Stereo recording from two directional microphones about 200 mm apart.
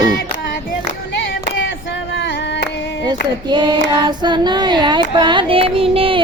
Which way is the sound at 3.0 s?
20° right (ahead or behind).